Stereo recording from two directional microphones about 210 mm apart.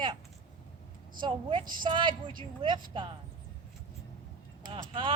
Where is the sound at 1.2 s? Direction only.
25° right (ahead or behind).